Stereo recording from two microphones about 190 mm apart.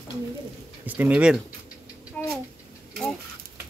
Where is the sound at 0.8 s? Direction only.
10° right (ahead or behind).